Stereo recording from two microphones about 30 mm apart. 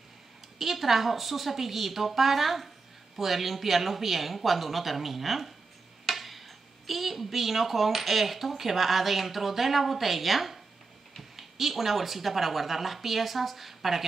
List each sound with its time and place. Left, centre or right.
0.6 s a woman's voice: centre